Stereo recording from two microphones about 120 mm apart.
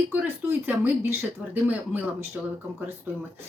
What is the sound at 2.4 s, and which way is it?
Speech, 5° right (ahead or behind).